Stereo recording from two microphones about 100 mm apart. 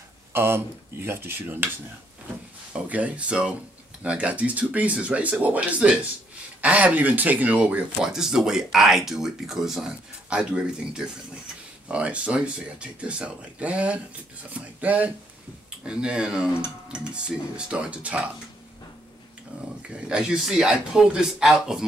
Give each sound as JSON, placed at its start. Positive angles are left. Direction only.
{"t": 0.3, "sound": "speech", "side_deg": -25}
{"t": 2.7, "sound": "speech", "side_deg": -15}
{"t": 19.9, "sound": "speech", "side_deg": -10}